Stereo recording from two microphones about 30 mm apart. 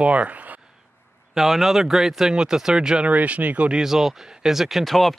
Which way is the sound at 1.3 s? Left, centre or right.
Centre.